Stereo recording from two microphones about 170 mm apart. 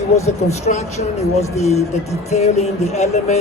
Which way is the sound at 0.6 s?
40° left (ahead or behind).